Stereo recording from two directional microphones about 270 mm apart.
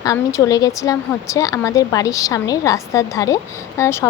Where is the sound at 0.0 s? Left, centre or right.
Centre.